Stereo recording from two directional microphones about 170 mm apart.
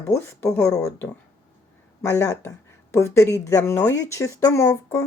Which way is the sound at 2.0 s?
15° left (ahead or behind).